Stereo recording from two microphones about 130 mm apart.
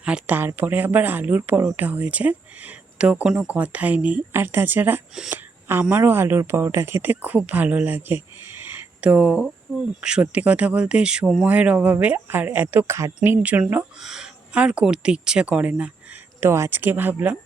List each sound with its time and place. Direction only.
0.0 s speech: 10° right (ahead or behind)
5.1 s a woman's voice: 5° right (ahead or behind)
5.9 s speech: 20° right (ahead or behind)